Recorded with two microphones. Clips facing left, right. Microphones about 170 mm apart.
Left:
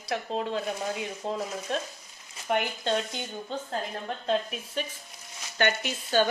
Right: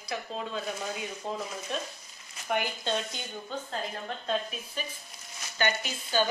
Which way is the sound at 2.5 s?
60° left (ahead or behind).